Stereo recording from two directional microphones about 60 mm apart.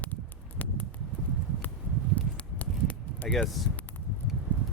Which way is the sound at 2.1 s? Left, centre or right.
Left.